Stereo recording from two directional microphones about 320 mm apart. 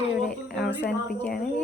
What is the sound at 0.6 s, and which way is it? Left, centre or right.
Speech, left.